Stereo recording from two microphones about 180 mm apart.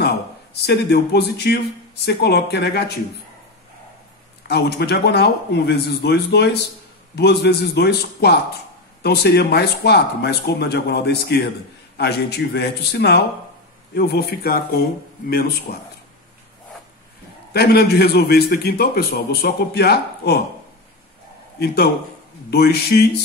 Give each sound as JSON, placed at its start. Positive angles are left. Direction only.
{"t": 0.7, "sound": "a man's voice", "side_deg": 65}
{"t": 4.5, "sound": "a man's voice", "side_deg": 65}
{"t": 17.5, "sound": "a man's voice", "side_deg": 65}
{"t": 21.5, "sound": "a man's voice", "side_deg": 60}